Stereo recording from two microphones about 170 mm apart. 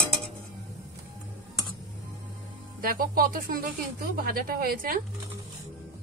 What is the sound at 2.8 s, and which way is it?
Speech, 60° right (ahead or behind).